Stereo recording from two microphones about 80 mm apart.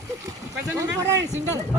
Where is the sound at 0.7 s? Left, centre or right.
Right.